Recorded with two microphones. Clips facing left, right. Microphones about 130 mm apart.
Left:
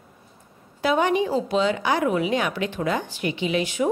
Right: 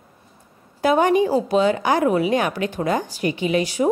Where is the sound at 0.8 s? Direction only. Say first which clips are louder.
Right 4 dB; 45° right (ahead or behind).